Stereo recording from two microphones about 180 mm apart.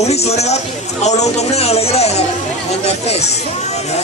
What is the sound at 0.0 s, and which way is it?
A man's voice, 35° left (ahead or behind).